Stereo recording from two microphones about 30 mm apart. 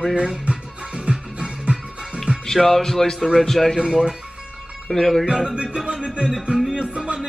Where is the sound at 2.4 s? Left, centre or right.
Centre.